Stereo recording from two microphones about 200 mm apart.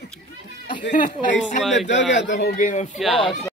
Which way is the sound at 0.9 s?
40° left (ahead or behind).